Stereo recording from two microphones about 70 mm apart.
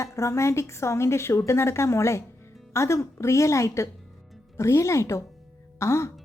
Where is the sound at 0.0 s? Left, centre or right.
Left.